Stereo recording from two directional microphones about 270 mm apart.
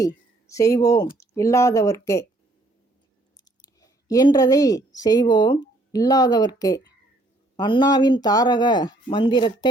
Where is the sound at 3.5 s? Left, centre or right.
Centre.